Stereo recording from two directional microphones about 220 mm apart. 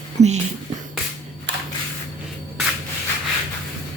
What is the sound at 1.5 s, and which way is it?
Single-lens reflex camera, 55° right (ahead or behind).